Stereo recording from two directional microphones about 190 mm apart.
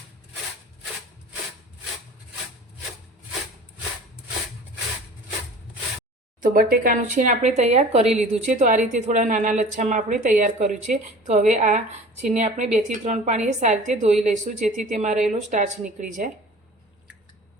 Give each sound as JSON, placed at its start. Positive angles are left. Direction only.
{"t": 6.4, "sound": "speech", "side_deg": -45}